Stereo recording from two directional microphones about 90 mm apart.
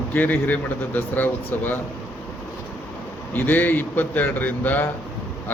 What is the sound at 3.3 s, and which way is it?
Speech, 20° left (ahead or behind).